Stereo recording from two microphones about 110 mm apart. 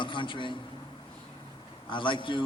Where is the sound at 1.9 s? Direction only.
50° left (ahead or behind).